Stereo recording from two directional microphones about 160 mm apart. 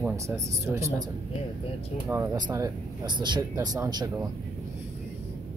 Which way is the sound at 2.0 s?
15° right (ahead or behind).